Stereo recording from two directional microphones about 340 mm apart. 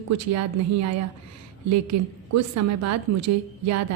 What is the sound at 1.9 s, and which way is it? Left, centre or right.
Speech, right.